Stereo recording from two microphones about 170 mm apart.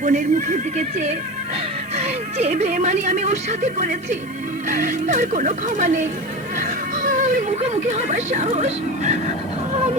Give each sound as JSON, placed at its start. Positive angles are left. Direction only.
{"t": 0.0, "sound": "speech", "side_deg": -50}
{"t": 2.0, "sound": "speech", "side_deg": -40}